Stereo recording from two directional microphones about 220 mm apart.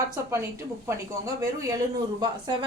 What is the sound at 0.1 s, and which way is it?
A woman's voice, 15° right (ahead or behind).